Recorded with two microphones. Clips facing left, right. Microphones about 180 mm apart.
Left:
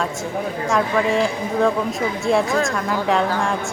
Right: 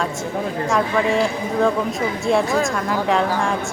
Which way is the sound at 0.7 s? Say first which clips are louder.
Even; centre (ahead or behind).